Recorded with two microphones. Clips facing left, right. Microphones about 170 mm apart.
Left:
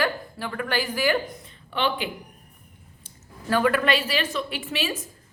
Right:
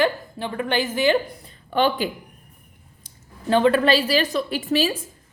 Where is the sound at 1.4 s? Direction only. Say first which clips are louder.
Right 6 dB; 40° right (ahead or behind).